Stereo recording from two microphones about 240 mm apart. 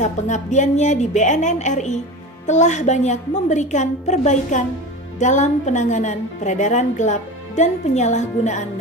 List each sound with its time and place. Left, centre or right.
0.0 s a woman's voice: left